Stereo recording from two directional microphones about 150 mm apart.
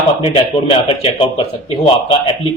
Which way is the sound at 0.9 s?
35° left (ahead or behind).